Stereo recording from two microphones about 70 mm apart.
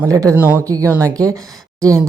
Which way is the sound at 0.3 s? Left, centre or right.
Right.